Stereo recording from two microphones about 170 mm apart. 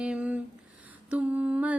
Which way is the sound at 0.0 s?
5° right (ahead or behind).